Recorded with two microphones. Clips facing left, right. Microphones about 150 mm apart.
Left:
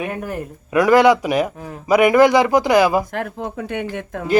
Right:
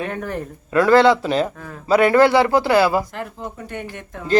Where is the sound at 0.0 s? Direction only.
10° left (ahead or behind).